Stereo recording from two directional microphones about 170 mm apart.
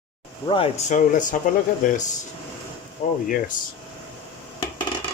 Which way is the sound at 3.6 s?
55° left (ahead or behind).